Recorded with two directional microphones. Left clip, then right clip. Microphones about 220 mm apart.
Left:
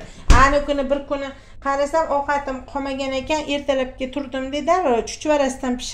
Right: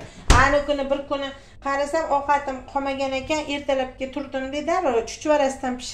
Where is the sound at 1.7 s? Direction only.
45° left (ahead or behind).